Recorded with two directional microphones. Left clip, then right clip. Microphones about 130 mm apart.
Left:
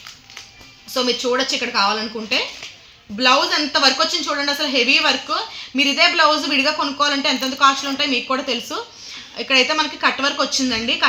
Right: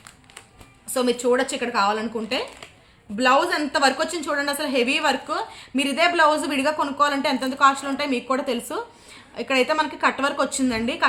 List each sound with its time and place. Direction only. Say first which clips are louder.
0.9 s a woman's voice: left 2 dB; 45° right (ahead or behind)